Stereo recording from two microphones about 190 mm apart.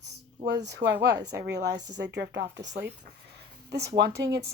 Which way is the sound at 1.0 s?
60° right (ahead or behind).